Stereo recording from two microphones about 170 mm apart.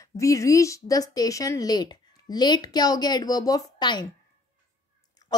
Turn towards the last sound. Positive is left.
turn(degrees=25)  # may be behind; listen again after turning